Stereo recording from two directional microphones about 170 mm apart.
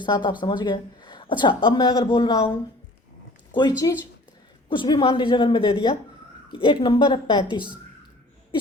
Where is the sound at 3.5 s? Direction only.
25° left (ahead or behind).